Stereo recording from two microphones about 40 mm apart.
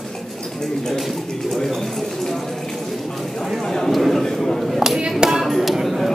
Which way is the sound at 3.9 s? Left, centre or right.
Centre.